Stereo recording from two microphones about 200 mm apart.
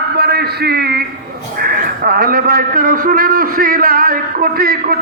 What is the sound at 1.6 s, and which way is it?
A man's voice, 45° right (ahead or behind).